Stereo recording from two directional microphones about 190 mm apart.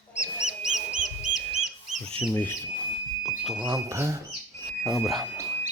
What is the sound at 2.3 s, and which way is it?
Speech, 10° left (ahead or behind).